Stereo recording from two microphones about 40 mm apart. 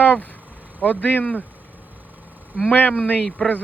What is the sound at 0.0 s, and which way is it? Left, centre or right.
Vehicle, left.